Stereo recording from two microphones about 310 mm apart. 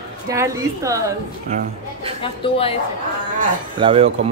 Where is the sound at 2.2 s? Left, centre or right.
Centre.